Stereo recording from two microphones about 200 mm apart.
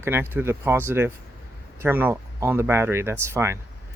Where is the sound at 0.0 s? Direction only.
10° right (ahead or behind).